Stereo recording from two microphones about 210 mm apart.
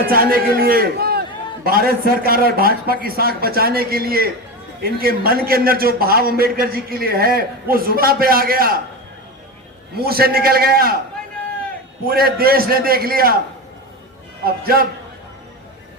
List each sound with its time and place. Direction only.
0.1 s a man's voice: 45° right (ahead or behind)
9.9 s a man's voice: 45° right (ahead or behind)
12.0 s a man's voice: 45° right (ahead or behind)
14.4 s a man's voice: 45° right (ahead or behind)